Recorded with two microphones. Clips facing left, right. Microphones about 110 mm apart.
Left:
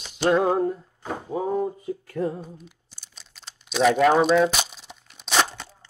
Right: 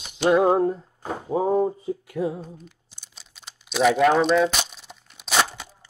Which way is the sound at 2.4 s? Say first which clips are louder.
Right 1 dB; 5° left (ahead or behind).